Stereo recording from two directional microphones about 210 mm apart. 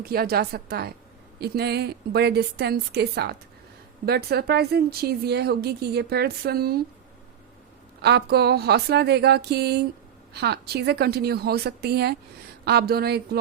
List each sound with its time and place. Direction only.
0.0 s speech: 45° right (ahead or behind)
8.0 s speech: 50° right (ahead or behind)